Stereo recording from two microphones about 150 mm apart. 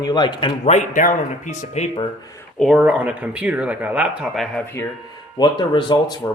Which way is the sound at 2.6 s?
5° right (ahead or behind).